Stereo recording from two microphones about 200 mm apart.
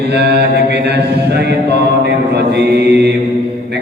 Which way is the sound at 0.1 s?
55° right (ahead or behind).